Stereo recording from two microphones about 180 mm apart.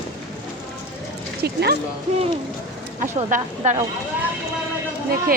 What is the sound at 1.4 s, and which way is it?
Speech, 65° right (ahead or behind).